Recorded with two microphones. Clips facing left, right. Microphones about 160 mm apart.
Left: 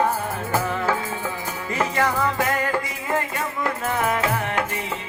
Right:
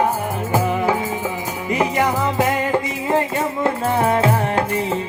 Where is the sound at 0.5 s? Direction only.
15° right (ahead or behind).